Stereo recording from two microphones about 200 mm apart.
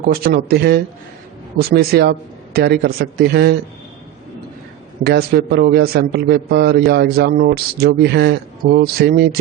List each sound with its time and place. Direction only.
0.0 s a man's voice: 50° right (ahead or behind)
5.0 s a man's voice: 50° right (ahead or behind)